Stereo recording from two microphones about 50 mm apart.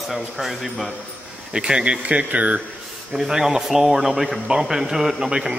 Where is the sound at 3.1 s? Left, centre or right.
Centre.